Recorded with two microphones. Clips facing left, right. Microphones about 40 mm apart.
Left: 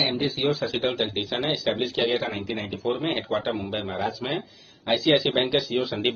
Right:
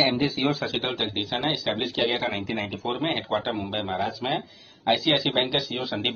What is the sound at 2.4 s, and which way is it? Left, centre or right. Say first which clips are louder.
Speech: right 1 dB; right.